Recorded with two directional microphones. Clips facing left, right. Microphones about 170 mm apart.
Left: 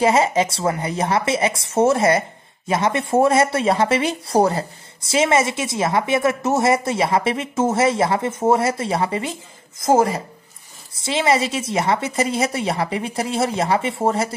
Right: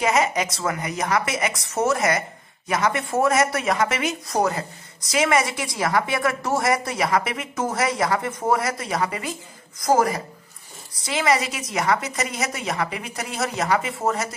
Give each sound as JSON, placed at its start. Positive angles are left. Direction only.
{"t": 0.0, "sound": "speech", "side_deg": 30}